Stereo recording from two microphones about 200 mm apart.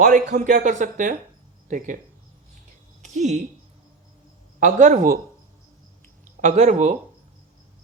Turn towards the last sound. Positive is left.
turn(degrees=-35)  # may be behind; listen again after turning